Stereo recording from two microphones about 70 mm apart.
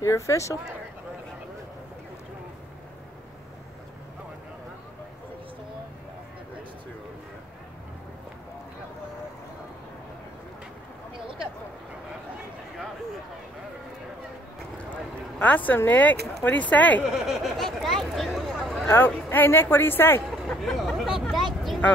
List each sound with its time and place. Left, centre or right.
0.0 s speech: left
15.3 s speech: left
17.0 s a sound: centre
18.9 s speech: left
20.4 s hubbub: centre